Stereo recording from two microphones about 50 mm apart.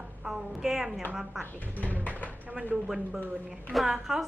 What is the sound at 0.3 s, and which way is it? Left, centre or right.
A woman's voice, centre.